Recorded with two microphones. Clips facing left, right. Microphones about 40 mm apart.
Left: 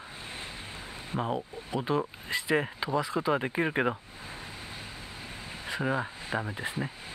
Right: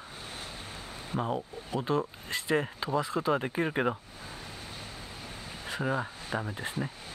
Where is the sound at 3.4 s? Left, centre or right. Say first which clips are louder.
Left 1 dB; left.